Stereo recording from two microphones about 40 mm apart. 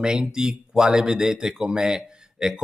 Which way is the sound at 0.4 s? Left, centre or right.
Centre.